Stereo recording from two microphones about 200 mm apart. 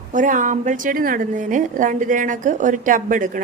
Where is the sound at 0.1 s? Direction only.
40° right (ahead or behind).